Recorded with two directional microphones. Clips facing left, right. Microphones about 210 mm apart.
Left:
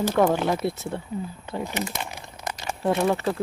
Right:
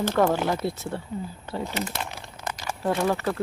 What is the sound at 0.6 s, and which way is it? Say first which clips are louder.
Speech: left 1 dB; 20° left (ahead or behind).